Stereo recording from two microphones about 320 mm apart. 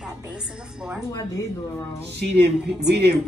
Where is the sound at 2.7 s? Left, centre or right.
Right.